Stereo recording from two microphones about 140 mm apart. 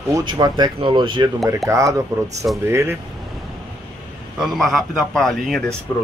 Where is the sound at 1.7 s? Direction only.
25° right (ahead or behind).